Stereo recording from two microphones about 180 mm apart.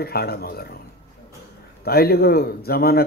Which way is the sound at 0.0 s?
60° left (ahead or behind).